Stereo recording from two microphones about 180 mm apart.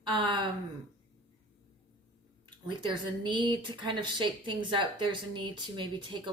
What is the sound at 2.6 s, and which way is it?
A woman's voice, 25° right (ahead or behind).